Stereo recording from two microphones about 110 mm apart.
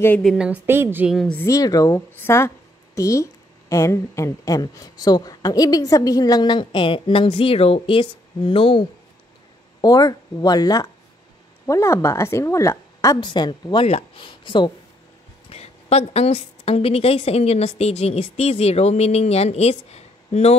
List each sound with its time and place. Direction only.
0.2 s a woman's voice: centre (ahead or behind)
0.5 s a woman's voice: 20° right (ahead or behind)
1.4 s speech: 30° left (ahead or behind)
2.0 s speech: 20° left (ahead or behind); by 8.8 s 50° left (ahead or behind)
9.8 s speech: 35° left (ahead or behind)
11.6 s a woman's voice: 25° left (ahead or behind)
13.2 s a woman's voice: 45° left (ahead or behind)
15.5 s a woman's voice: 70° left (ahead or behind)